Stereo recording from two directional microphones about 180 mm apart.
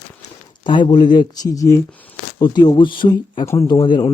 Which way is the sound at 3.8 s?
25° left (ahead or behind).